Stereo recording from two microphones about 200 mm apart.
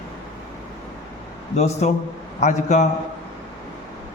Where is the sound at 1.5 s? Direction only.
35° left (ahead or behind).